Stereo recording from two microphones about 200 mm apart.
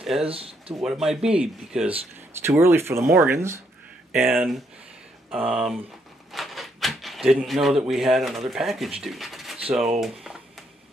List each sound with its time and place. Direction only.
0.0 s speech: centre (ahead or behind)
0.3 s speech: 30° right (ahead or behind)
0.8 s speech: centre (ahead or behind)
6.3 s a sound: centre (ahead or behind)
8.5 s speech: centre (ahead or behind)